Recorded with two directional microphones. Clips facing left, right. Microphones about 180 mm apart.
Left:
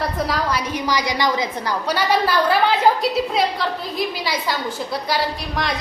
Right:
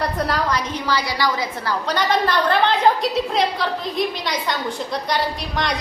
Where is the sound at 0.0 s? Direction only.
Centre (ahead or behind).